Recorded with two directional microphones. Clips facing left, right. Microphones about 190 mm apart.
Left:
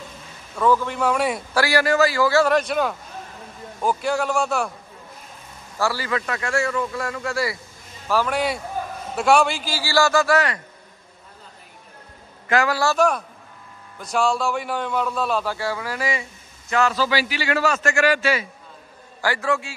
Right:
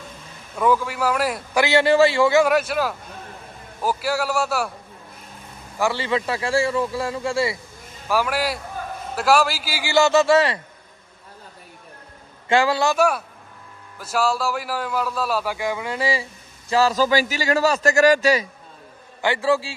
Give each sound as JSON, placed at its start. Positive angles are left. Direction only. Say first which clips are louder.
{"t": 0.6, "sound": "a man's voice", "louder": "even", "side_deg": -10}
{"t": 1.5, "sound": "a man's voice", "louder": "right 4 dB", "side_deg": -20}
{"t": 2.4, "sound": "a man's voice", "louder": "even", "side_deg": -5}
{"t": 5.8, "sound": "a man's voice", "louder": "right 2 dB", "side_deg": -20}
{"t": 8.1, "sound": "a man's voice", "louder": "even", "side_deg": -10}
{"t": 12.4, "sound": "a man's voice", "louder": "right 2 dB", "side_deg": -30}
{"t": 12.9, "sound": "a man's voice", "louder": "even", "side_deg": -10}
{"t": 16.0, "sound": "a man's voice", "louder": "right 3 dB", "side_deg": -30}
{"t": 19.2, "sound": "a man's voice", "louder": "right 3 dB", "side_deg": -25}